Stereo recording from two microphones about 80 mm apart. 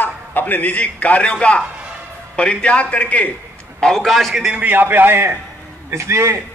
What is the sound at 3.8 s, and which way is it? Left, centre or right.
Speech, centre.